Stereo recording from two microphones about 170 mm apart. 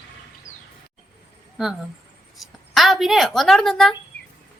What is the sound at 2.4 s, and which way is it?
A woman's voice, centre (ahead or behind).